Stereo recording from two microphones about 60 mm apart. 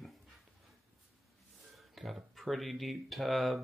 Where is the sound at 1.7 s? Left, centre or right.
Centre.